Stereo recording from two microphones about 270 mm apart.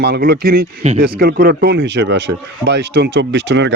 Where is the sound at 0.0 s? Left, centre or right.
Right.